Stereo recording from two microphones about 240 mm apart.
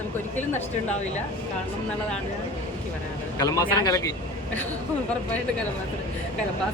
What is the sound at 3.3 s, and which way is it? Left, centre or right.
Speech, centre.